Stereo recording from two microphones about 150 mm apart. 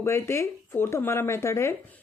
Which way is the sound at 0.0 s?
20° left (ahead or behind).